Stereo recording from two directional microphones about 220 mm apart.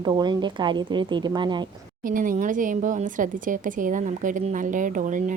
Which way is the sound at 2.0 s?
40° right (ahead or behind).